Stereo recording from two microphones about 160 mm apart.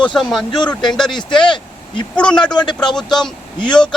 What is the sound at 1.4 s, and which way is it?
Vehicle, 30° left (ahead or behind).